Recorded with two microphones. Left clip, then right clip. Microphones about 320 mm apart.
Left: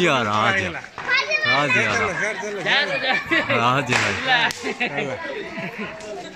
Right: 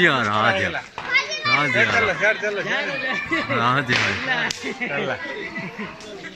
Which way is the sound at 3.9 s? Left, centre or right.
Left.